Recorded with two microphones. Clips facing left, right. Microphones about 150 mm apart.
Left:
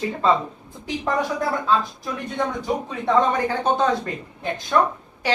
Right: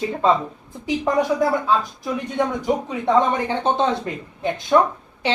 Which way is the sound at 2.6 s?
20° right (ahead or behind).